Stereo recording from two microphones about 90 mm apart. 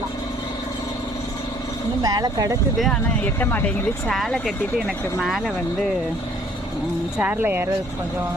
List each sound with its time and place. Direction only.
2.0 s speech: 50° right (ahead or behind)
2.7 s speech: centre (ahead or behind)
3.2 s speech: 20° left (ahead or behind)
4.0 s speech: 5° left (ahead or behind)
7.2 s speech: 20° right (ahead or behind)